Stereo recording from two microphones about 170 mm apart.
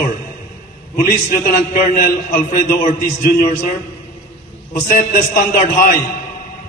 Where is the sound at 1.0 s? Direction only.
55° left (ahead or behind).